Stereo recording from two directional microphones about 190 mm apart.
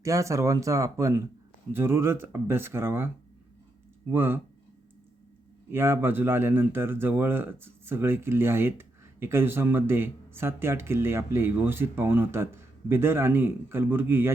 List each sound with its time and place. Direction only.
0.0 s speech: 15° right (ahead or behind)
4.1 s speech: 10° right (ahead or behind)
5.7 s speech: 10° right (ahead or behind)